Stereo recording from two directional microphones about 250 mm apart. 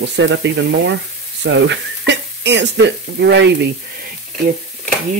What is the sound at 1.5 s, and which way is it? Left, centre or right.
Speech, right.